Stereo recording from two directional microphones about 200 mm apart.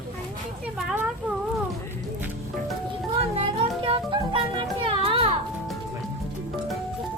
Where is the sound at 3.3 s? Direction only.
25° right (ahead or behind).